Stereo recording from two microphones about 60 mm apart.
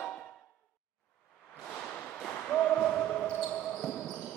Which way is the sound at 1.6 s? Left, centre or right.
Centre.